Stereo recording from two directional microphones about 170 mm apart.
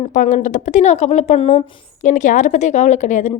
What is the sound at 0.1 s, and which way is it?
A woman's voice, 45° left (ahead or behind).